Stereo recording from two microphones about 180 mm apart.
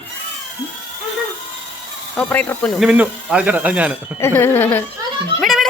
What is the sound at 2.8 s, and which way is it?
Speech, 5° right (ahead or behind).